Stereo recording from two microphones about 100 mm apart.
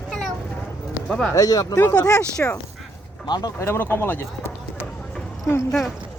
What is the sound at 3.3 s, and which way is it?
Speech, 45° left (ahead or behind).